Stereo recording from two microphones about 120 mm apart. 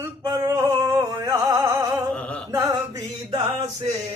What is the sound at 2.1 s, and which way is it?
Music, 10° left (ahead or behind).